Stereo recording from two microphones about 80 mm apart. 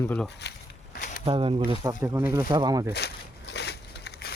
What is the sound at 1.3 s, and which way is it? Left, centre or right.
Speech, right.